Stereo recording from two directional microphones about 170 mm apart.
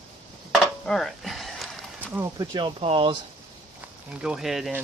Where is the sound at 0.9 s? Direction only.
Centre (ahead or behind).